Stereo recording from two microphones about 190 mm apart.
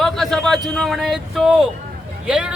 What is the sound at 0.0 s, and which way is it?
A man's voice, centre (ahead or behind).